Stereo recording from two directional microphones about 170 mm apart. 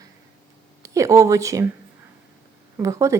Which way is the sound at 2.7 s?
20° right (ahead or behind).